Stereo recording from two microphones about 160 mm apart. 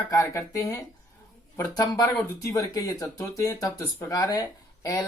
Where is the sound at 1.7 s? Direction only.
25° left (ahead or behind).